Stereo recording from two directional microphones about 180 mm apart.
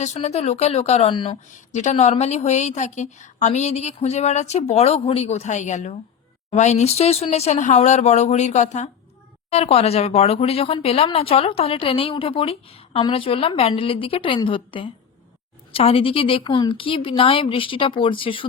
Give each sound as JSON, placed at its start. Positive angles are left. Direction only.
{"t": 0.0, "sound": "speech", "side_deg": 40}
{"t": 1.7, "sound": "speech", "side_deg": 40}